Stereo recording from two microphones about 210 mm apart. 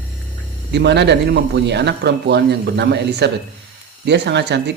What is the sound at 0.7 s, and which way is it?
Speech, 55° right (ahead or behind).